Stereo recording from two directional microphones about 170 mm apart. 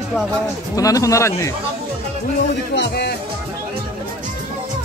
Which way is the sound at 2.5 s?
85° left.